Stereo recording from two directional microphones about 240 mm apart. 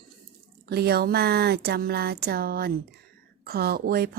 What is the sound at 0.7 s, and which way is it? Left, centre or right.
Speech, right.